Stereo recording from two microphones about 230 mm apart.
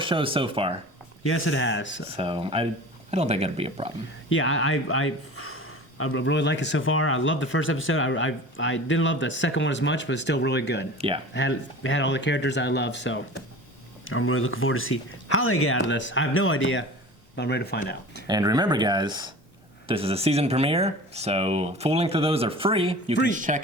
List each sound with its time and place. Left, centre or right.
0.0 s speech: right
1.2 s speech: left
2.1 s speech: right
4.3 s speech: left
10.9 s speech: right
11.3 s speech: left
14.0 s speech: left
17.3 s speech: left
18.3 s speech: centre; by 23.6 s right